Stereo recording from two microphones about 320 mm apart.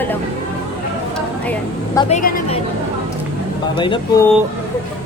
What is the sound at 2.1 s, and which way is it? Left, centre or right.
Speech, left.